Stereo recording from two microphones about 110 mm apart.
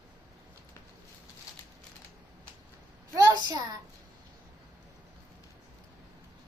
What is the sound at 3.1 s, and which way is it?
Speech, 35° right (ahead or behind).